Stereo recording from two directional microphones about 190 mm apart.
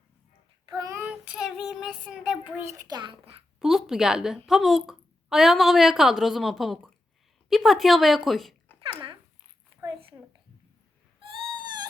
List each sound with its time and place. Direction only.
0.8 s child singing: 15° right (ahead or behind)
3.6 s a woman's voice: centre (ahead or behind)
9.8 s a sound: 30° right (ahead or behind)